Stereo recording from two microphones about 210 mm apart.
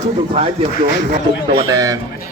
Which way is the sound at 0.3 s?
30° right (ahead or behind).